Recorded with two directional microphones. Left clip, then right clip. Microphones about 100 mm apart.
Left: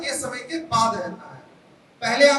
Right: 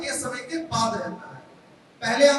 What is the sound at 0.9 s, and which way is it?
Speech, 20° right (ahead or behind).